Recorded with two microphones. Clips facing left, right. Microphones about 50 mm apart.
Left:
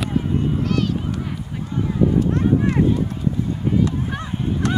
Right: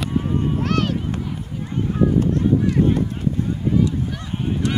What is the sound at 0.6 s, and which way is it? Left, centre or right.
Run, right.